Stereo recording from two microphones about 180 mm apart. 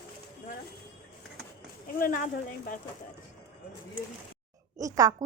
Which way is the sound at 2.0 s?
50° left (ahead or behind).